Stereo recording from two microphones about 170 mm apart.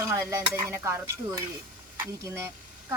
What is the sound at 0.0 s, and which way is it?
Speech, 15° right (ahead or behind).